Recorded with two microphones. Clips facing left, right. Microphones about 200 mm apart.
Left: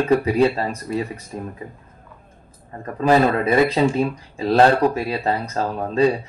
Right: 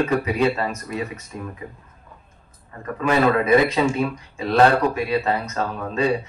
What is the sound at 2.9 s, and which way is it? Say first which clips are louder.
Speech: left 2 dB; 35° left (ahead or behind).